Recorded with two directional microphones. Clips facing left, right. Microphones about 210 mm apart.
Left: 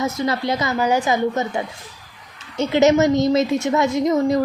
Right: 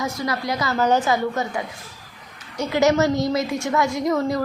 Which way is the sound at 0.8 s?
10° left (ahead or behind).